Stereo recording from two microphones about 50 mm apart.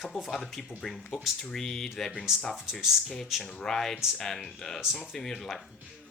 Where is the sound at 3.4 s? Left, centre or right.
Centre.